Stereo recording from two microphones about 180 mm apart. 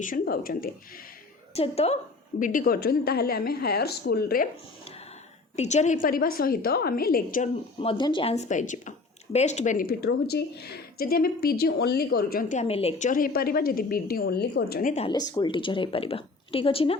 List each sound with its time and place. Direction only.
0.0 s a woman's voice: 50° left (ahead or behind)
1.5 s speech: 35° left (ahead or behind)
2.4 s a woman's voice: 50° left (ahead or behind)
5.5 s a woman's voice: 40° left (ahead or behind)
7.8 s a woman's voice: 30° left (ahead or behind); by 15.0 s 50° left (ahead or behind)
15.0 s a woman's voice: 20° left (ahead or behind)